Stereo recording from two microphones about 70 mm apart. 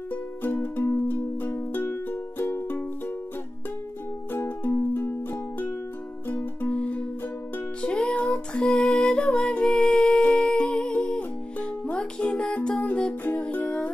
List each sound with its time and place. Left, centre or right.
0.1 s music: left
4.3 s music: left; by 13.9 s centre